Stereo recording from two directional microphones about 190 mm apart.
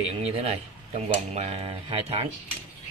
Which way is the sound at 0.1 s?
35° right (ahead or behind).